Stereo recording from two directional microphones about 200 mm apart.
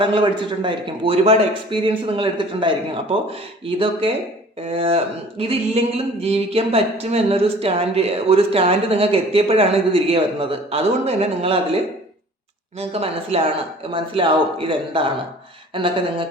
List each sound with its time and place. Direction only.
0.0 s speech: 25° right (ahead or behind)
4.6 s speech: 30° right (ahead or behind)
12.8 s speech: 30° right (ahead or behind)